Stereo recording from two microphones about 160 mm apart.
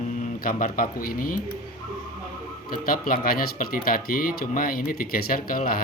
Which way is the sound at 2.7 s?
60° left (ahead or behind).